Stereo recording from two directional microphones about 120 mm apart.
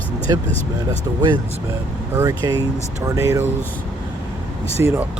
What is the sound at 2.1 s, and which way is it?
Speech, 25° right (ahead or behind).